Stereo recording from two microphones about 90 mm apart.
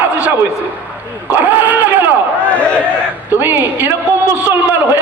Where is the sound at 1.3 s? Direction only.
20° right (ahead or behind).